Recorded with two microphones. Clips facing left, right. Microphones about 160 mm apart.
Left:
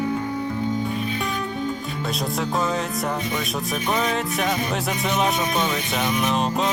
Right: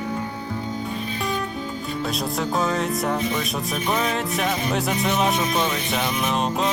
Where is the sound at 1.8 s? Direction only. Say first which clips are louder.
Right 1 dB; centre (ahead or behind).